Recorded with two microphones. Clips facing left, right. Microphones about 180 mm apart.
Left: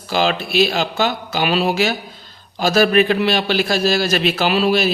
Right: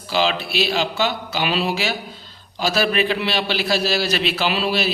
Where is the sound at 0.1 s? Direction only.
45° left (ahead or behind).